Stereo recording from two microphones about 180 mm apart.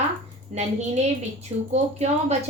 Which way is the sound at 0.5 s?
35° right (ahead or behind).